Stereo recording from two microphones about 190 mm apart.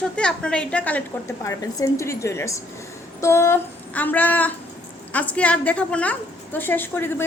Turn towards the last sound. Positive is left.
turn(degrees=10)  # may be behind; listen again after turning